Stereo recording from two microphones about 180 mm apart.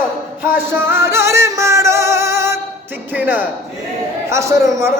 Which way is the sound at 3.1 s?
10° right (ahead or behind).